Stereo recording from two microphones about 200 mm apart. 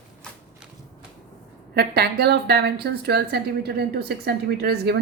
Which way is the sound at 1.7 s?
50° right (ahead or behind).